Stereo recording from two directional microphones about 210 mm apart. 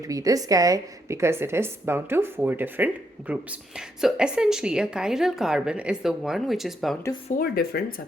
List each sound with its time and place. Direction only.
0.0 s a woman's voice: 15° right (ahead or behind); by 6.9 s centre (ahead or behind)
7.3 s speech: 45° left (ahead or behind)